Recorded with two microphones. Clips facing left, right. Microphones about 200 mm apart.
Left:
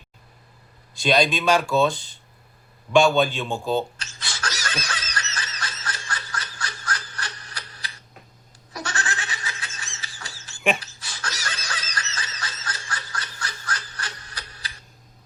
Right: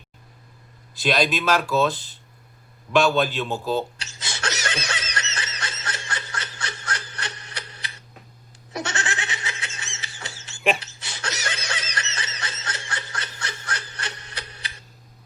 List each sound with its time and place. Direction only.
0.9 s speech: centre (ahead or behind)
4.2 s snicker: 20° right (ahead or behind)
8.7 s goat: 20° right (ahead or behind)
10.8 s snicker: 20° right (ahead or behind)
13.9 s wood: 25° right (ahead or behind)